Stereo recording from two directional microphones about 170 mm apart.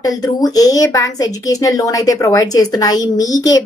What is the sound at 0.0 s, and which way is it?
A woman's voice, 20° left (ahead or behind).